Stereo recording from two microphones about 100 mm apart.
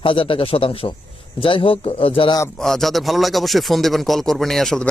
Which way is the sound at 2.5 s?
5° left (ahead or behind).